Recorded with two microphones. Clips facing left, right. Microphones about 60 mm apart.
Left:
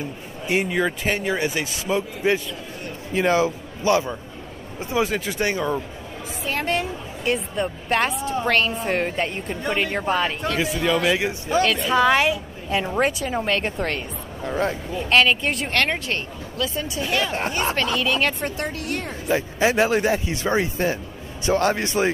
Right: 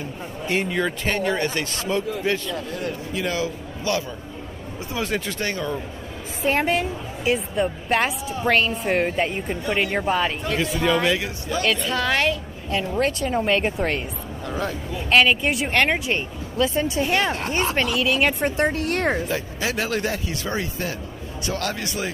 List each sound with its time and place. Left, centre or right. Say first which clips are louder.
0.5 s a man's voice: left 2 dB; centre
3.2 s a man's voice: left 8 dB; left
5.0 s a woman's voice: left 1 dB; centre
5.4 s a man's voice: left 3 dB; centre
6.6 s a woman's voice: right 2 dB; centre
11.1 s a man's voice: left 5 dB; left
11.6 s a woman's voice: right 3 dB; centre
11.9 s a woman's voice: left 7 dB; centre
15.0 s a woman's voice: right 1 dB; centre
15.8 s speech: right 4 dB; centre
16.5 s a woman's voice: right 5 dB; right
17.9 s speech: right 2 dB; centre
18.4 s a woman's voice: right 6 dB; right
19.2 s a man's voice: left 5 dB; left